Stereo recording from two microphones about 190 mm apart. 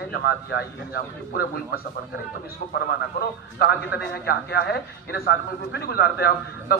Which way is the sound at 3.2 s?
60° left (ahead or behind).